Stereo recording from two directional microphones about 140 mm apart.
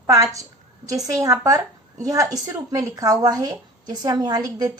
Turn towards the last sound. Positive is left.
turn(degrees=-30)  # may be behind; listen again after turning